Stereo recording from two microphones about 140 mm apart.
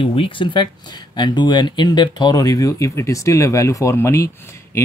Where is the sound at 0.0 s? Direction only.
40° left (ahead or behind).